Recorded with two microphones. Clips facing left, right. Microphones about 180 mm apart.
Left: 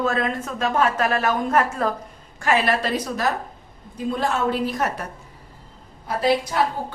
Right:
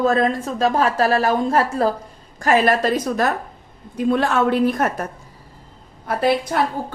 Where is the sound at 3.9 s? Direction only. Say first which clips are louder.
Right 6 dB; 70° right (ahead or behind); by 5.0 s 55° right (ahead or behind).